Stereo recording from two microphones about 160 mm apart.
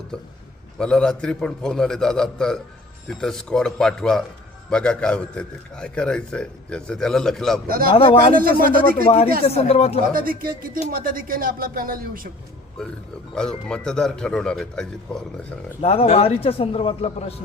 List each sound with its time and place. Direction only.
0.8 s a man's voice: 5° left (ahead or behind)
8.4 s speech: 65° right (ahead or behind)
9.0 s a man's voice: 40° left (ahead or behind)
10.1 s speech: 65° right (ahead or behind)
13.3 s a man's voice: 5° left (ahead or behind)
15.8 s a man's voice: 40° left (ahead or behind)